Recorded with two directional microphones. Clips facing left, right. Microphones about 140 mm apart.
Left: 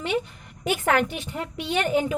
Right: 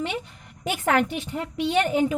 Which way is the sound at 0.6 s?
30° right (ahead or behind).